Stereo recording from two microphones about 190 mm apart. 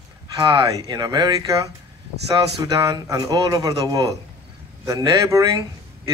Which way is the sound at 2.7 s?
20° right (ahead or behind).